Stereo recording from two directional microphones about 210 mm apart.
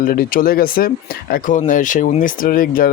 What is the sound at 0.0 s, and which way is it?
A man's voice, 45° left (ahead or behind).